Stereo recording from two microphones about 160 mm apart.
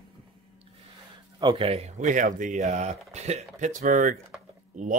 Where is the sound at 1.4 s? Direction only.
30° right (ahead or behind).